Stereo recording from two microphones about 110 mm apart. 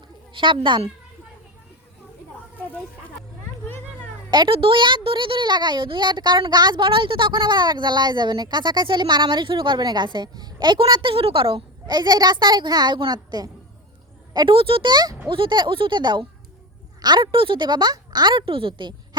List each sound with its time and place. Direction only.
0.3 s speech: 50° right (ahead or behind)
4.3 s speech: 50° right (ahead or behind)
14.3 s speech: 50° right (ahead or behind)